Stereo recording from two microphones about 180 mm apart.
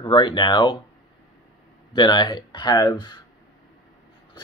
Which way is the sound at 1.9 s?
25° left (ahead or behind).